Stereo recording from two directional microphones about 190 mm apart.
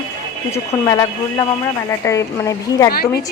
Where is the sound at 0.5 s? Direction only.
20° left (ahead or behind).